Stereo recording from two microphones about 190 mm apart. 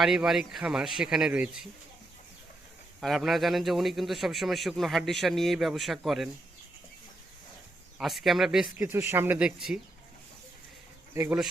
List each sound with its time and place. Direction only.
0.0 s a man's voice: 5° right (ahead or behind)
3.0 s a man's voice: centre (ahead or behind)
7.9 s a man's voice: centre (ahead or behind)
8.8 s speech: 15° right (ahead or behind)
11.1 s speech: 15° right (ahead or behind)